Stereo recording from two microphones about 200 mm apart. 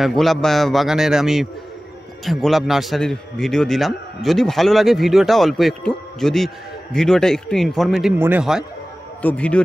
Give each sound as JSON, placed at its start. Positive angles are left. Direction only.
{"t": 0.0, "sound": "a man's voice", "side_deg": 0}
{"t": 9.2, "sound": "a man's voice", "side_deg": 5}